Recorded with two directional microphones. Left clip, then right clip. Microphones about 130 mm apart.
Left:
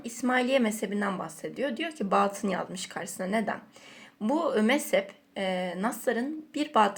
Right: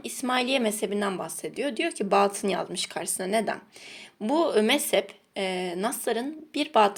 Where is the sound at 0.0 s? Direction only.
25° right (ahead or behind).